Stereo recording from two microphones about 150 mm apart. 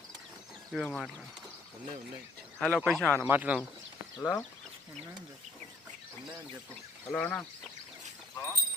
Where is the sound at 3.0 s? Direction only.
5° left (ahead or behind).